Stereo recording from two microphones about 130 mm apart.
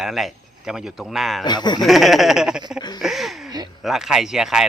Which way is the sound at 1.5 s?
35° left (ahead or behind).